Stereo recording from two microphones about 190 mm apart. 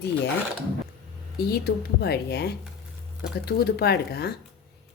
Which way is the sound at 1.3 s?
55° left (ahead or behind).